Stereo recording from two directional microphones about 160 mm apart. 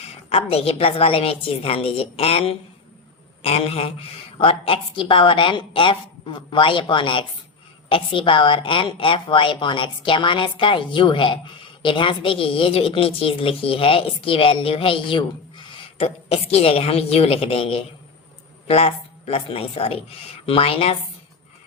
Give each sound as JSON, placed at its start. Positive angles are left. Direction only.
{"t": 0.0, "sound": "a woman's voice", "side_deg": 40}